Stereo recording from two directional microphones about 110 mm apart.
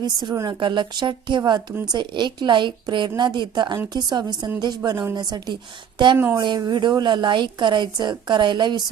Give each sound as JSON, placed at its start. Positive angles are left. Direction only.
{"t": 0.0, "sound": "a woman's voice", "side_deg": -40}
{"t": 6.1, "sound": "speech", "side_deg": -20}
{"t": 6.6, "sound": "a woman's voice", "side_deg": -40}